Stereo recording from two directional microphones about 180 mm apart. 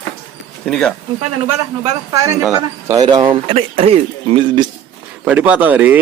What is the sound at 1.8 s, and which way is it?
Speech, 20° right (ahead or behind).